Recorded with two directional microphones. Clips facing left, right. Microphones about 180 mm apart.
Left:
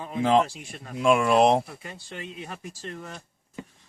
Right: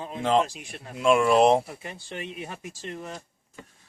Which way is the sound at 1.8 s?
25° right (ahead or behind).